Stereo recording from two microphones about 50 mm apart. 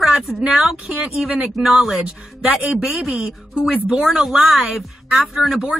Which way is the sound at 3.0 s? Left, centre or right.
Centre.